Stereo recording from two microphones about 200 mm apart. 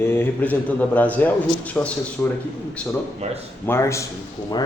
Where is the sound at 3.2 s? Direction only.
35° right (ahead or behind).